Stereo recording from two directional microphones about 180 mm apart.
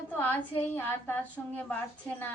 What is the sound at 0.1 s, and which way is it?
A woman's voice, 10° left (ahead or behind).